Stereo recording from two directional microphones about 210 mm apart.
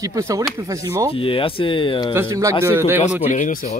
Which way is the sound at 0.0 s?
15° right (ahead or behind).